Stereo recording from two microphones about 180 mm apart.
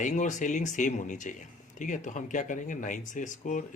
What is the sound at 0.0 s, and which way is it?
Speech, 45° left (ahead or behind).